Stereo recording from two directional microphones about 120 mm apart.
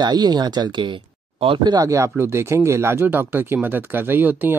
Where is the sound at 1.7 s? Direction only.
25° right (ahead or behind).